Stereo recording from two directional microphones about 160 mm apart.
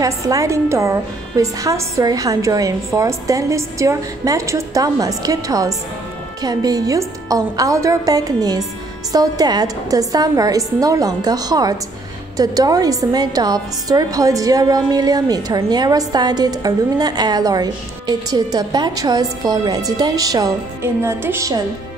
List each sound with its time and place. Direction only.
0.0 s a woman's voice: 20° right (ahead or behind)